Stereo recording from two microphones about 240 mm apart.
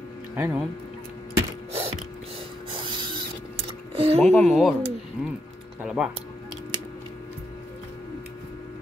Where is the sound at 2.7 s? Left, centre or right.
Centre.